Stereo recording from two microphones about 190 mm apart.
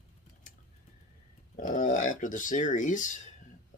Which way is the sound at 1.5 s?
40° left (ahead or behind).